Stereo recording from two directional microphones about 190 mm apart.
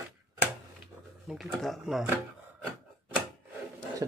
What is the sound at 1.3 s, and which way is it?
Speech, centre (ahead or behind).